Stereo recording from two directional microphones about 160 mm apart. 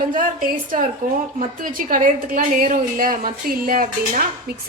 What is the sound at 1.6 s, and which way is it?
A woman's voice, 60° right (ahead or behind).